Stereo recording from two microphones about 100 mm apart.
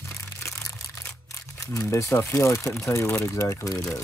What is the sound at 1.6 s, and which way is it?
Speech, 35° left (ahead or behind).